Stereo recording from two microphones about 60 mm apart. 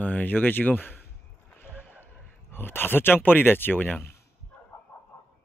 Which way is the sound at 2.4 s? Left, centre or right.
Left.